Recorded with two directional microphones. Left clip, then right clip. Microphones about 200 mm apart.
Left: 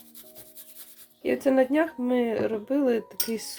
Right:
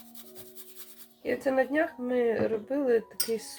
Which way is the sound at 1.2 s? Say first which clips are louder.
Left 4 dB; 40° left (ahead or behind).